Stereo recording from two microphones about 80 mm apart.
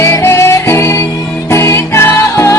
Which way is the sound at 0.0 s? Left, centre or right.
Left.